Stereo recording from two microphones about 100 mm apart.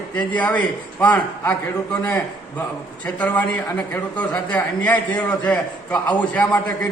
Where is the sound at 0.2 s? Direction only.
15° left (ahead or behind).